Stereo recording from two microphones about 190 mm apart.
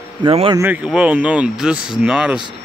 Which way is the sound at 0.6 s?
10° right (ahead or behind).